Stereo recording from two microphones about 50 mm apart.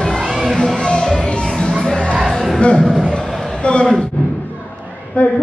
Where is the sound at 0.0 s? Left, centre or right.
Centre.